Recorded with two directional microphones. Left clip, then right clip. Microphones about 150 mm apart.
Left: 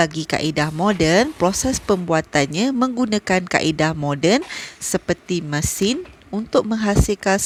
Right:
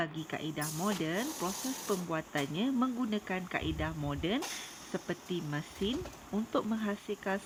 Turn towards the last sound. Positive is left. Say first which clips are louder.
# left 17 dB
turn(degrees=50)  # may be behind; listen again after turning